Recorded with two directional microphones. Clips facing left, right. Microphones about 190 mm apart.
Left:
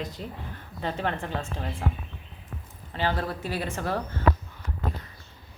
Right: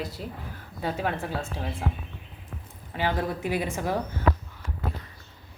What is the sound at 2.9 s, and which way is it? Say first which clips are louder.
A woman's voice: right 1 dB; 15° right (ahead or behind).